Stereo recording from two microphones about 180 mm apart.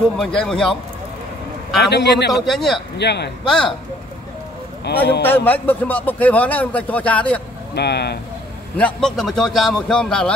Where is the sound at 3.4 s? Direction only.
5° left (ahead or behind).